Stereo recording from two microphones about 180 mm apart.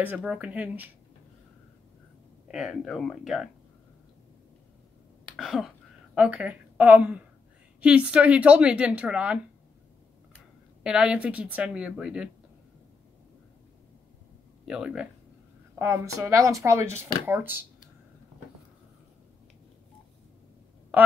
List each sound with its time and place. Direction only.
0.0 s speech: 10° right (ahead or behind)
2.4 s speech: centre (ahead or behind)
5.3 s throat clearing: centre (ahead or behind)
6.1 s a woman's voice: 5° right (ahead or behind)
10.8 s speech: 5° right (ahead or behind)
14.7 s speech: 5° right (ahead or behind)
15.8 s speech: 15° right (ahead or behind)
20.9 s speech: 10° right (ahead or behind)